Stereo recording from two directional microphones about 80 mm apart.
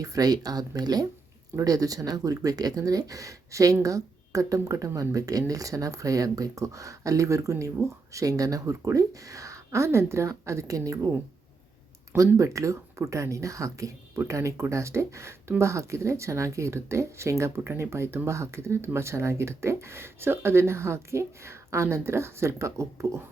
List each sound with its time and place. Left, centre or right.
0.0 s a woman's voice: right
12.4 s speech: right